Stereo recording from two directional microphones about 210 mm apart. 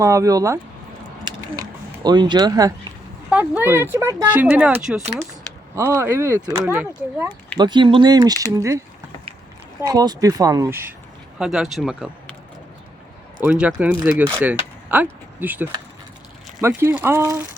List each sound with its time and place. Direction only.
0.0 s speech: 15° right (ahead or behind)
1.3 s a sound: 20° right (ahead or behind)
2.0 s speech: 20° right (ahead or behind)
3.2 s speech: 5° right (ahead or behind)
7.6 s speech: 20° right (ahead or behind)
9.8 s speech: 20° right (ahead or behind)
13.4 s speech: 5° right (ahead or behind)